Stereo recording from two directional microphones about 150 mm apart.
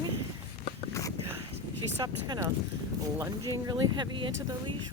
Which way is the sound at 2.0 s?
25° right (ahead or behind).